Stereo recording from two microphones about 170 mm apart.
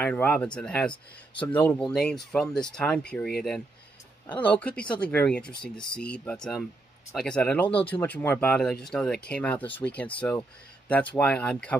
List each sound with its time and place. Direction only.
0.0 s speech: 10° left (ahead or behind)